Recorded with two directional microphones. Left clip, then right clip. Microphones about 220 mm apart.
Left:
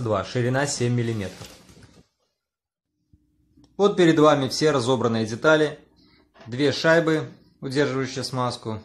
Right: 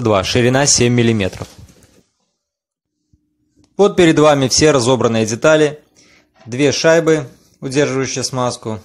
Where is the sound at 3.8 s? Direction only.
35° right (ahead or behind).